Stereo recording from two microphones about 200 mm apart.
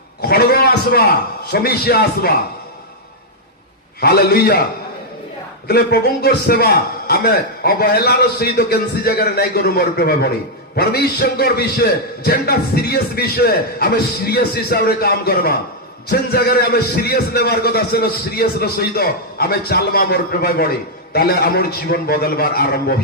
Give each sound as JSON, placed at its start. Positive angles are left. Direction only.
{"t": 0.2, "sound": "a sound", "side_deg": 50}
{"t": 1.5, "sound": "a man's voice", "side_deg": 50}
{"t": 4.0, "sound": "a man's voice", "side_deg": 50}
{"t": 5.6, "sound": "a man's voice", "side_deg": 50}